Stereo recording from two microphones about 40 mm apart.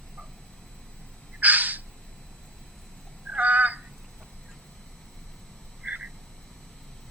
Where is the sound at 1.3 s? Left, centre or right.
Right.